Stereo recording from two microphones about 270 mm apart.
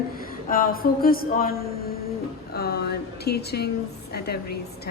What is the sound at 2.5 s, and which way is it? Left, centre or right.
A woman's voice, left.